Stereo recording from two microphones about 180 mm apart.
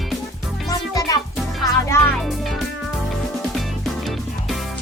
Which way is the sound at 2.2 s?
Centre (ahead or behind).